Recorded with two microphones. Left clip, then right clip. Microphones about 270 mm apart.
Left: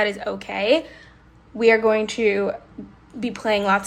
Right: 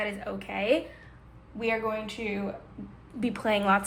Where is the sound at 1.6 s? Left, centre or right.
Left.